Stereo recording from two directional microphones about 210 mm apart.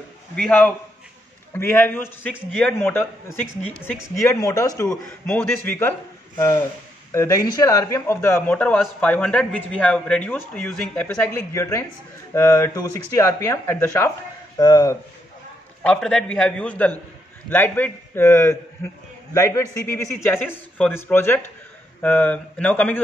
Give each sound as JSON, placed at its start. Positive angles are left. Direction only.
{"t": 0.4, "sound": "a man's voice", "side_deg": 5}
{"t": 15.8, "sound": "a man's voice", "side_deg": 5}